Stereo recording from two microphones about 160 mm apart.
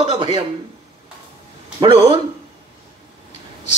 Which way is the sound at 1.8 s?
30° right (ahead or behind).